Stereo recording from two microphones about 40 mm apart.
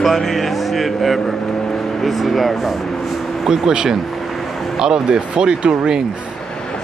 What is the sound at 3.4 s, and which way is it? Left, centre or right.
Speech, centre.